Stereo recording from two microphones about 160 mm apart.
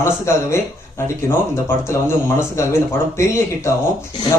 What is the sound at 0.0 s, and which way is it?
Speech, 15° left (ahead or behind).